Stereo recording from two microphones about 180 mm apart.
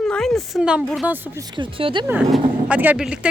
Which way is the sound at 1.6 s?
30° right (ahead or behind).